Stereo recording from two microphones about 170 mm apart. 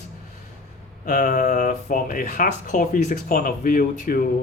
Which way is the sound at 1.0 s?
45° left (ahead or behind).